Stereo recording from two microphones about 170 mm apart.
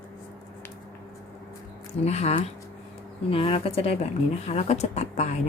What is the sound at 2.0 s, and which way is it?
A woman's voice, 40° left (ahead or behind).